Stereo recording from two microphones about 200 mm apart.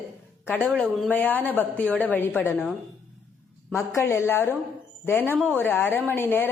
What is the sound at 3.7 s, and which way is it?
Speech, 15° left (ahead or behind).